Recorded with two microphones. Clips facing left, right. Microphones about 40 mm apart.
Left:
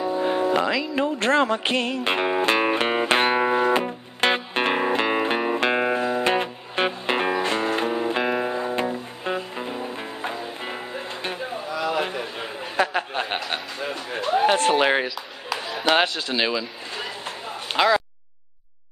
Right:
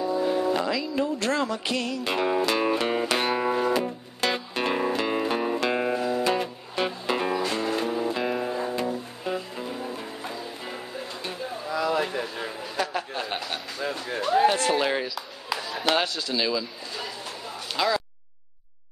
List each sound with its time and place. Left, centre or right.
0.0 s music: left
13.5 s a man's voice: left
14.5 s speech: left
15.9 s a sound: left